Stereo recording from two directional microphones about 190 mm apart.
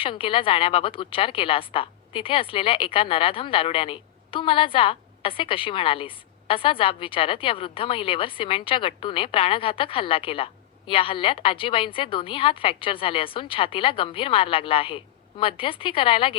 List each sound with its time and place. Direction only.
0.0 s a woman's voice: 25° left (ahead or behind)